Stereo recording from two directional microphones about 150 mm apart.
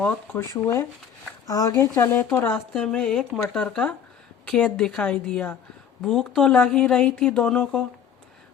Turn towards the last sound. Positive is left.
turn(degrees=5)  # may be behind; listen again after turning